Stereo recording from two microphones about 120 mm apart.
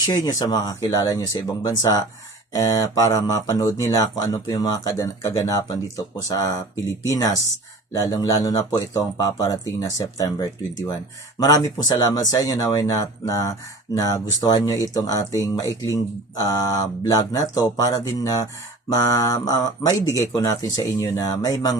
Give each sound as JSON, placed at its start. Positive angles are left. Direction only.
{"t": 0.0, "sound": "speech", "side_deg": 35}